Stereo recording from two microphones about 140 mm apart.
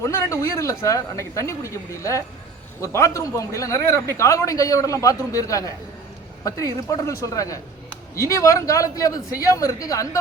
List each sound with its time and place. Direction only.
0.0 s a man's voice: 20° left (ahead or behind)